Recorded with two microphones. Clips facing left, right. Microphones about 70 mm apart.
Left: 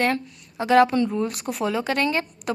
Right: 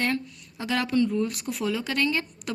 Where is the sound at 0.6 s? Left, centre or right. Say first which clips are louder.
Left 7 dB; left.